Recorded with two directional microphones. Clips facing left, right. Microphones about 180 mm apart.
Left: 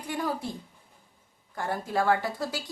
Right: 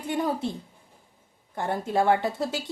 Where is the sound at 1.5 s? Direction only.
25° right (ahead or behind).